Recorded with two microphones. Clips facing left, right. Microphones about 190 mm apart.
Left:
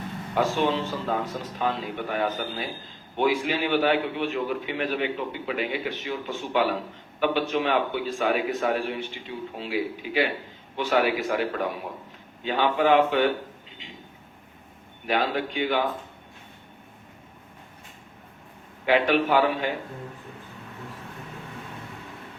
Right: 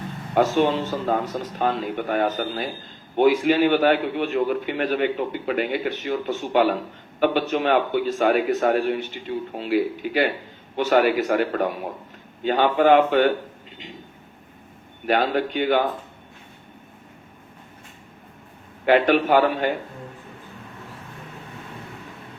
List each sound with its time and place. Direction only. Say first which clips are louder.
0.3 s a man's voice: right 5 dB; 50° right (ahead or behind)
10.8 s speech: right 5 dB; 40° right (ahead or behind)
11.3 s a man's voice: right 5 dB; 60° right (ahead or behind)
12.5 s a man's voice: right 4 dB; 45° right (ahead or behind)
15.0 s a man's voice: right 5 dB; 55° right (ahead or behind)
18.9 s a man's voice: right 4 dB; 45° right (ahead or behind)